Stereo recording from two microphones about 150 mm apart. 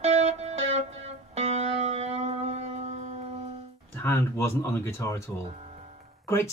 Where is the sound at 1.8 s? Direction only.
45° right (ahead or behind).